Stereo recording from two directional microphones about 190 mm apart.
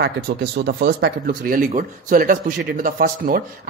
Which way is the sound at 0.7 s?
60° right (ahead or behind).